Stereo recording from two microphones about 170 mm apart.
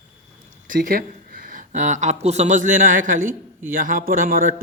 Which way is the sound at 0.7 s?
55° right (ahead or behind).